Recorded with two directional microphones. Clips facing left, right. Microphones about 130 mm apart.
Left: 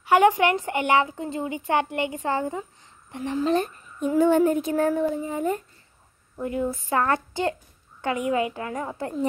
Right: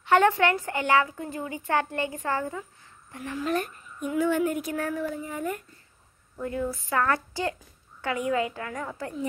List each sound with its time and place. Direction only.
0.0 s a woman's voice: 10° left (ahead or behind)